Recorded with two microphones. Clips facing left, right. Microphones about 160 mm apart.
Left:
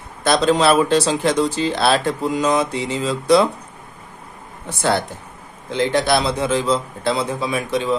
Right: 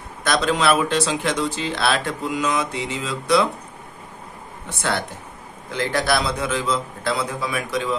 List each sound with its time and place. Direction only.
0.2 s speech: 30° left (ahead or behind)
5.7 s a man's voice: 25° left (ahead or behind)